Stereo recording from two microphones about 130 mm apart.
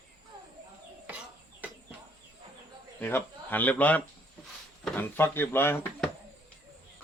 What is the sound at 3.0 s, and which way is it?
A man's voice, 15° left (ahead or behind).